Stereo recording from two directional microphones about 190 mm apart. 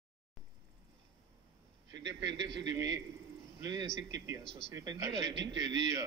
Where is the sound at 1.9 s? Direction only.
20° right (ahead or behind).